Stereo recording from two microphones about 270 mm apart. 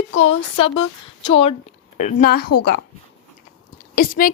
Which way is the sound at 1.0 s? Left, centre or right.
Left.